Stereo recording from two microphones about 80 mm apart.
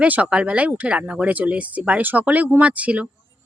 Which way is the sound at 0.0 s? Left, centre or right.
Centre.